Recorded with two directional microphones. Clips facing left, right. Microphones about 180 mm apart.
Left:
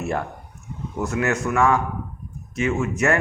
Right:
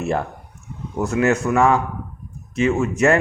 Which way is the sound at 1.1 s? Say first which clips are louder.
Right 5 dB; 30° right (ahead or behind).